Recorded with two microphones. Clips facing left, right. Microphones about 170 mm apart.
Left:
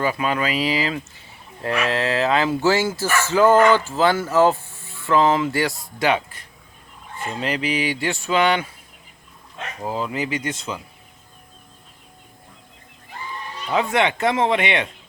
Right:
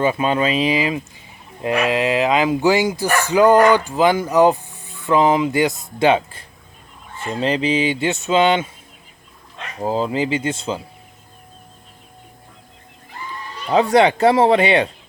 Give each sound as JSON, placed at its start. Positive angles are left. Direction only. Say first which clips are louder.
{"t": 0.0, "sound": "speech", "louder": "right 4 dB", "side_deg": -25}
{"t": 9.8, "sound": "speech", "louder": "right 6 dB", "side_deg": -30}
{"t": 13.7, "sound": "speech", "louder": "right 6 dB", "side_deg": -35}